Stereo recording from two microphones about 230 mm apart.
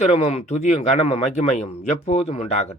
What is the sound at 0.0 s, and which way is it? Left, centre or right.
Speech, left.